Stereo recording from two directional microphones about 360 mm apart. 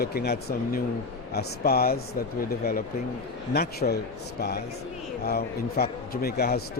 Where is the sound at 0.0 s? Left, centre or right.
Left.